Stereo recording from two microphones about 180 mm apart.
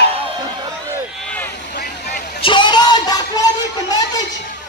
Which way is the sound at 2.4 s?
25° left (ahead or behind).